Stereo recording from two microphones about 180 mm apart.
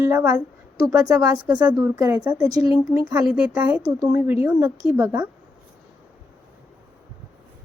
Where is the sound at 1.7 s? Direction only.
20° right (ahead or behind).